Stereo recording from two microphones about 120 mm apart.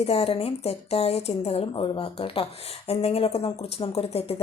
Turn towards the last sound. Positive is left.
turn(degrees=55)  # may be behind; listen again after turning